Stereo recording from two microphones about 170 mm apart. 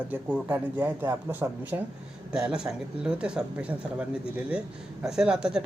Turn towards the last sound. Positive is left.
turn(degrees=-5)  # may be behind; listen again after turning